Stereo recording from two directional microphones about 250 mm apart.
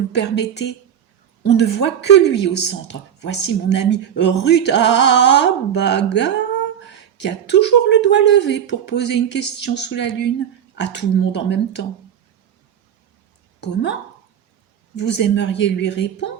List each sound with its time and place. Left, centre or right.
0.1 s speech: left
14.9 s speech: left